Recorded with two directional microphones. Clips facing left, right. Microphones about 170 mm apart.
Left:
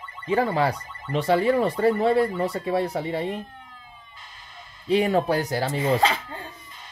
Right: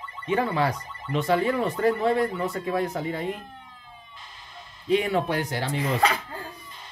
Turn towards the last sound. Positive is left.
turn(degrees=25)  # may be behind; listen again after turning